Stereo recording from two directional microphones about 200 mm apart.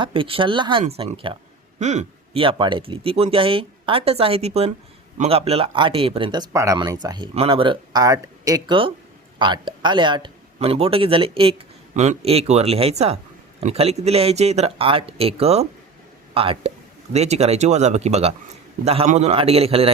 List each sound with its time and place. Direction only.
0.0 s speech: 25° right (ahead or behind)